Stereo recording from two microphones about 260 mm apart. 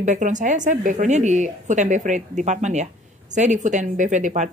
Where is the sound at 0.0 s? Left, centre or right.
Right.